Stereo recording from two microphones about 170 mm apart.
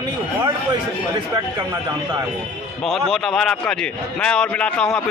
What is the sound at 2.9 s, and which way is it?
A man's voice, centre (ahead or behind).